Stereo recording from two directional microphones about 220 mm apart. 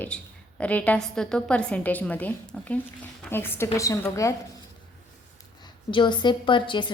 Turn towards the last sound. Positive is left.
turn(degrees=20)  # may be behind; listen again after turning